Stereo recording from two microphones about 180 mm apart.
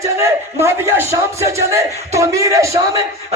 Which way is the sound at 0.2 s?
15° right (ahead or behind).